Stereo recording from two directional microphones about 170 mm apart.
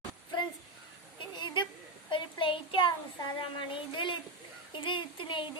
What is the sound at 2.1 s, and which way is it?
Child singing, 30° left (ahead or behind).